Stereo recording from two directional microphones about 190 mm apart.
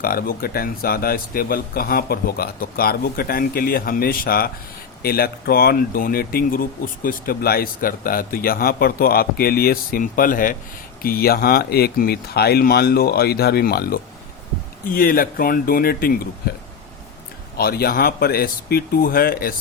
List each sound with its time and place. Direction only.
0.0 s speech: 50° left (ahead or behind)
17.6 s speech: 55° left (ahead or behind)